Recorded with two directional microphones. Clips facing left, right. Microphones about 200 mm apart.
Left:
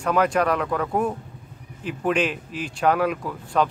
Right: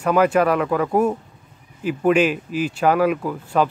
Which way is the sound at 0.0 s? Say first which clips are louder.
Right 4 dB; 5° right (ahead or behind).